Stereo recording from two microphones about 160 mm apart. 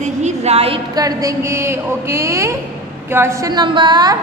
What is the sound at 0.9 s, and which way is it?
Speech, 20° right (ahead or behind).